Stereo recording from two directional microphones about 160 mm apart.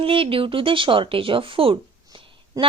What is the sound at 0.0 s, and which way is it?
Speech, 35° right (ahead or behind).